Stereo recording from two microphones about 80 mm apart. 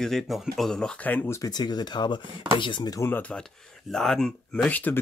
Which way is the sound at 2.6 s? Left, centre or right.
Left.